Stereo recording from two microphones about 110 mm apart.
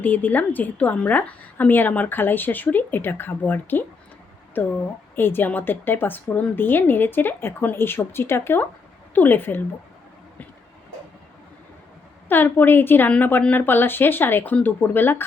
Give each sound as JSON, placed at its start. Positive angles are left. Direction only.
{"t": 0.0, "sound": "a woman's voice", "side_deg": 15}
{"t": 12.3, "sound": "a woman's voice", "side_deg": 20}